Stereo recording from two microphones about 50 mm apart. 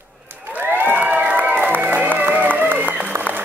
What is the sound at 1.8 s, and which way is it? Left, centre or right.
Music, right.